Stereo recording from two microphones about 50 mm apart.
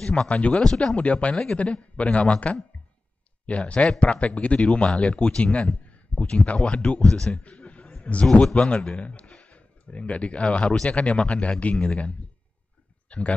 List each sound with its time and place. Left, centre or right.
0.0 s speech: left
0.6 s speech: centre
0.9 s speech: left
7.5 s a sound: left
8.5 s speech: left
11.7 s speech: centre
13.1 s speech: left